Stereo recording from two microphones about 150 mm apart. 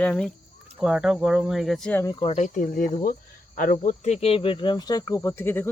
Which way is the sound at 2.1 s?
45° left (ahead or behind).